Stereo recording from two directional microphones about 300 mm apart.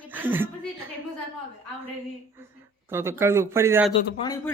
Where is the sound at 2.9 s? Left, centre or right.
Centre.